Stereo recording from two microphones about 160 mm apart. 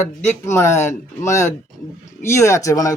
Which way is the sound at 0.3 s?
15° left (ahead or behind).